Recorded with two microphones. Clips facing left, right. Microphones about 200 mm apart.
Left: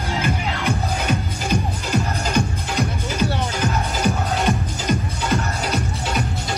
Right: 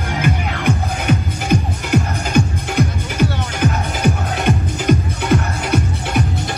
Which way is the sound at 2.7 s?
65° right (ahead or behind).